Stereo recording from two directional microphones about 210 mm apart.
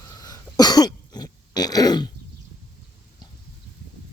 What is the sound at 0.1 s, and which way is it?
Cough, 15° left (ahead or behind).